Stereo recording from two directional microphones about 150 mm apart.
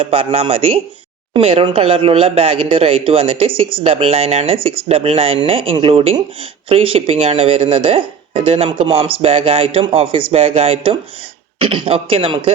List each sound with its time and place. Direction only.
0.0 s speech: 40° right (ahead or behind)